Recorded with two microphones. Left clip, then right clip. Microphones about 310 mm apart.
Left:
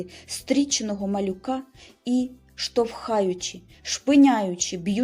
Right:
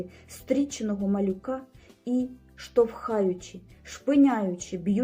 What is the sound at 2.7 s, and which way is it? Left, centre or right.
A woman's voice, centre.